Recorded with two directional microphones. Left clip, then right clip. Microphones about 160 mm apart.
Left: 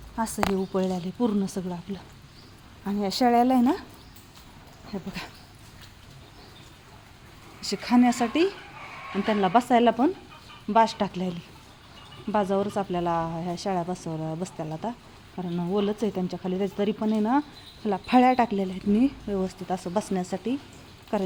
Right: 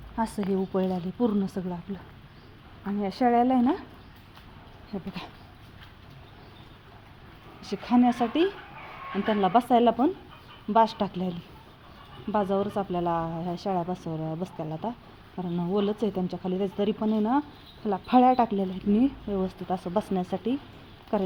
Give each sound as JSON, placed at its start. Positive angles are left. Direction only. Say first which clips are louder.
{"t": 0.2, "sound": "a woman's voice", "louder": "left 2 dB", "side_deg": 0}
{"t": 4.9, "sound": "a woman's voice", "louder": "left 2 dB", "side_deg": 0}
{"t": 7.6, "sound": "a woman's voice", "louder": "left 1 dB", "side_deg": 15}